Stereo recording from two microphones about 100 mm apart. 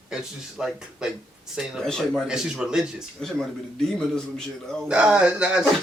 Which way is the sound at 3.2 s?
5° left (ahead or behind).